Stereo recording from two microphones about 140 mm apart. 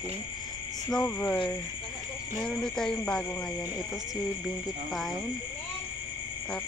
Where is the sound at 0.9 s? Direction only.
10° left (ahead or behind).